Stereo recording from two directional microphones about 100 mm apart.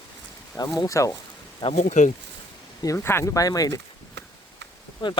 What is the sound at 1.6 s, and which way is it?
Speech, 55° left (ahead or behind).